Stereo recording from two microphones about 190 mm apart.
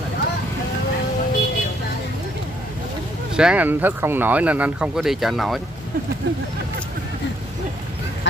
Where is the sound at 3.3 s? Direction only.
5° right (ahead or behind).